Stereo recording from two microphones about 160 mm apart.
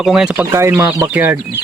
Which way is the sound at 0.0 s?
Centre (ahead or behind).